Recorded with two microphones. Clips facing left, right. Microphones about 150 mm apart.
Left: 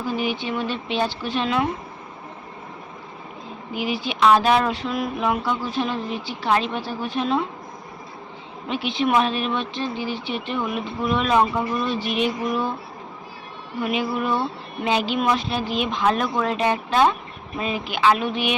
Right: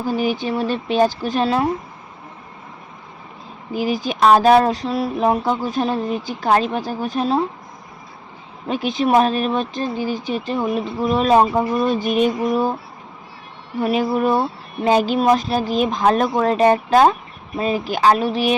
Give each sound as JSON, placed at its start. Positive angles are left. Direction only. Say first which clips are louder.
{"t": 0.0, "sound": "speech", "louder": "right 5 dB", "side_deg": -40}
{"t": 3.7, "sound": "speech", "louder": "right 5 dB", "side_deg": -40}
{"t": 8.6, "sound": "speech", "louder": "right 4 dB", "side_deg": -40}
{"t": 13.8, "sound": "speech", "louder": "right 6 dB", "side_deg": -40}